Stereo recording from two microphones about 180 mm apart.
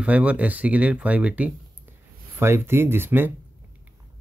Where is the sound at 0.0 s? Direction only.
5° right (ahead or behind).